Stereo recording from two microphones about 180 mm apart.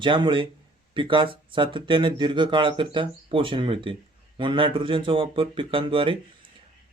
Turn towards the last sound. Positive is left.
turn(degrees=-30)  # may be behind; listen again after turning